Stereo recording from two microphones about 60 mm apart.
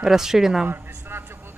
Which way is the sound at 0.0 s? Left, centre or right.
Centre.